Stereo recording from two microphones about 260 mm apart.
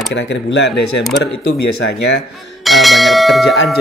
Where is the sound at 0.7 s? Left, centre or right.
Left.